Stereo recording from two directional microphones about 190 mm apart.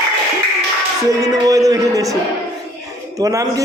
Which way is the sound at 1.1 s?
20° right (ahead or behind).